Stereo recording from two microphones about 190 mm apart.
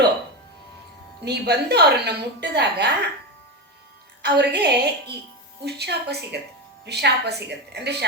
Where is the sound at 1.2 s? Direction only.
60° right (ahead or behind).